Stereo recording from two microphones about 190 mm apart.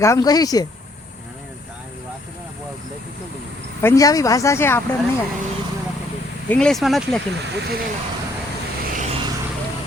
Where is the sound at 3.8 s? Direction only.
15° left (ahead or behind).